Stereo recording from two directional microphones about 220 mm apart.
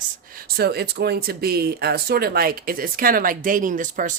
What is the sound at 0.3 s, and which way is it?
Speech, 45° right (ahead or behind).